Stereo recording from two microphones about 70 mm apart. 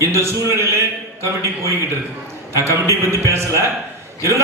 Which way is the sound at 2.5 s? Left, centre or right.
Right.